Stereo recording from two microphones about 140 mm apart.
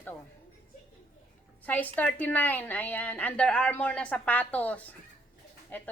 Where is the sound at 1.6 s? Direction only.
10° left (ahead or behind).